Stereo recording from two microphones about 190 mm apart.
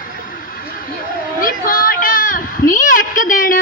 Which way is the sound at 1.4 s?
50° left (ahead or behind).